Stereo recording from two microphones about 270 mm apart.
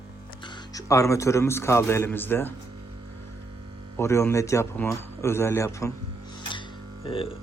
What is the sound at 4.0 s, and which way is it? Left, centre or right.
Speech, centre.